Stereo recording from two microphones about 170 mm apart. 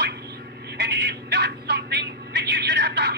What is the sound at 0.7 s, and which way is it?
Telephone, 80° right.